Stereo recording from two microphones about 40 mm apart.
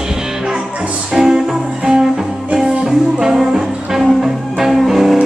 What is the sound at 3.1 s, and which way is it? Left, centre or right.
Music, centre.